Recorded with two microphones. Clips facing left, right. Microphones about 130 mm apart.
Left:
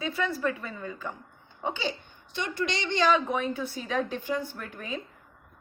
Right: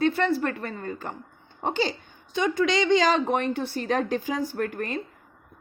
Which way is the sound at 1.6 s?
85° right.